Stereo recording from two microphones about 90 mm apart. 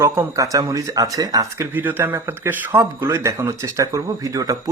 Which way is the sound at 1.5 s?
20° right (ahead or behind).